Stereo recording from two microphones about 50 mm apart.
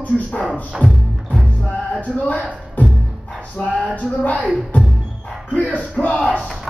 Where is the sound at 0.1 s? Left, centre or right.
Centre.